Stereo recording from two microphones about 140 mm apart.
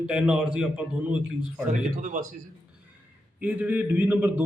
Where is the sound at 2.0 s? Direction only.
60° right (ahead or behind).